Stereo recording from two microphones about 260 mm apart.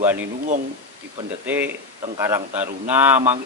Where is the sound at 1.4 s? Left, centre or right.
Centre.